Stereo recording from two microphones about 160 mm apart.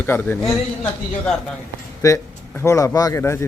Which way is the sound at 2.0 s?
20° left (ahead or behind).